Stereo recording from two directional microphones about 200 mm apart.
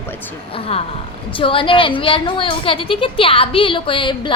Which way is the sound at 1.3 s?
25° left (ahead or behind).